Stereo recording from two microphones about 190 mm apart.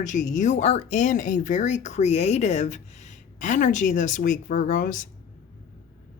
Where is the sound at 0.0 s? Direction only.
40° left (ahead or behind).